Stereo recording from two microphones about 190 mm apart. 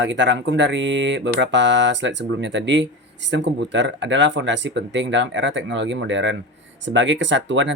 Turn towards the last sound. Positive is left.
turn(degrees=-70)  # may be behind; listen again after turning